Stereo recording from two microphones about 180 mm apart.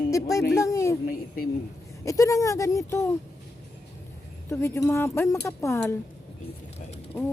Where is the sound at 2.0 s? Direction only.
20° left (ahead or behind).